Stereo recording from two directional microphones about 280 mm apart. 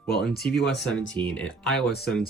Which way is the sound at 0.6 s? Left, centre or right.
Left.